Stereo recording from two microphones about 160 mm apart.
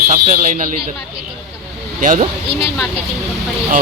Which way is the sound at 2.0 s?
55° right (ahead or behind).